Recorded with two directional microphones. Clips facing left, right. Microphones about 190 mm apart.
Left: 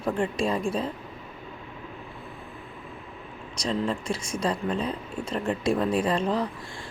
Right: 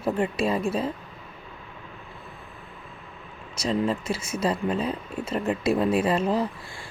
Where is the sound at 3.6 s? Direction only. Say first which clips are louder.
Right 3 dB; 5° right (ahead or behind).